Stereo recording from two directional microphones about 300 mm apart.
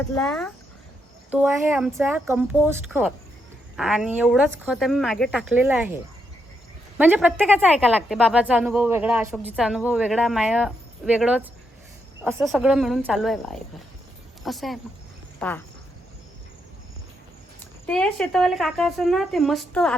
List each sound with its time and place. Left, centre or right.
0.1 s a woman's voice: centre
7.0 s a woman's voice: centre
17.6 s a woman's voice: centre